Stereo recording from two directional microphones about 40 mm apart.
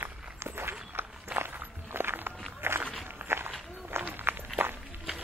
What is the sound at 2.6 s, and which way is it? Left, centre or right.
Walk, right.